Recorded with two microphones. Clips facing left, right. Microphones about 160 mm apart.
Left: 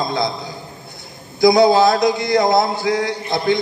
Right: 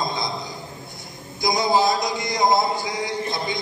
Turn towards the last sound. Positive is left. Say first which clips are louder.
# left 7 dB
turn(degrees=70)  # may be behind; listen again after turning